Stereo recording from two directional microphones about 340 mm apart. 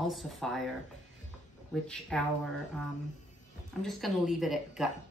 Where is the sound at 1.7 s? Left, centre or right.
Centre.